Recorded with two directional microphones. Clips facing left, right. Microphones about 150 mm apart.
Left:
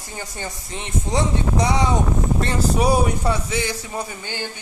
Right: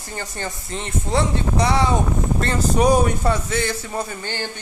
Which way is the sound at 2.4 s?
10° left (ahead or behind).